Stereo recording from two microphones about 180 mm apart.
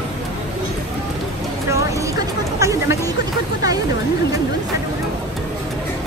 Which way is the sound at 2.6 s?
15° right (ahead or behind).